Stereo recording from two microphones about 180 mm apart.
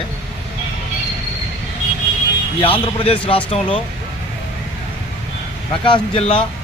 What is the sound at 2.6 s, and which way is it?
Speech, 30° left (ahead or behind).